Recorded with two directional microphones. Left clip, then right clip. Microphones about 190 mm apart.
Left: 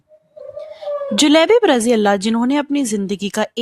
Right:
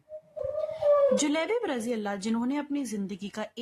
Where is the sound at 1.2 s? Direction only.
50° left (ahead or behind).